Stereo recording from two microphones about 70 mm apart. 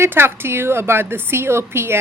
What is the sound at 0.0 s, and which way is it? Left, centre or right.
A woman's voice, right.